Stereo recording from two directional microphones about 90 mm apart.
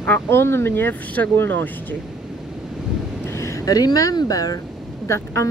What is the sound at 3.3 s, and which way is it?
Speech, 35° left (ahead or behind).